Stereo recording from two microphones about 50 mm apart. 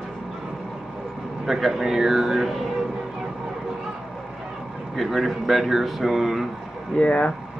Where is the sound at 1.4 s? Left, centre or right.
Centre.